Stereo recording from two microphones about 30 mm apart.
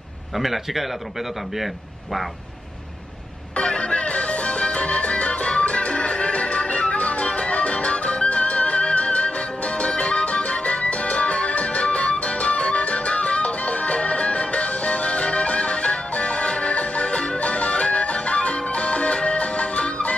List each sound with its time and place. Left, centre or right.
0.4 s speech: centre
3.5 s music: left